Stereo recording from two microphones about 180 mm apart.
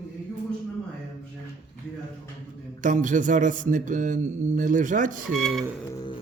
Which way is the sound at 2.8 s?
45° right (ahead or behind).